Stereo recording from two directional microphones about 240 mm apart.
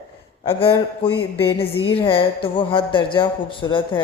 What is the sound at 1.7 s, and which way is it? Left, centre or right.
A woman's voice, left.